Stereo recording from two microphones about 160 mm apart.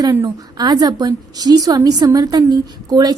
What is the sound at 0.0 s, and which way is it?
A woman's voice, 20° right (ahead or behind).